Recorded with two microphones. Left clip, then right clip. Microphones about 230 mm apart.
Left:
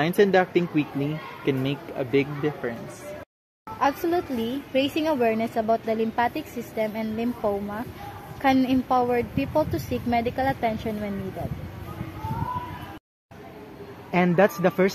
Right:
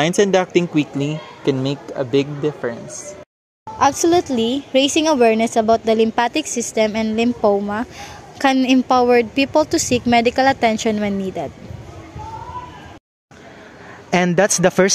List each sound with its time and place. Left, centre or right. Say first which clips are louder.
0.0 s a woman's voice: right 4 dB; right
3.8 s a woman's voice: right 9 dB; right
14.1 s speech: right 5 dB; right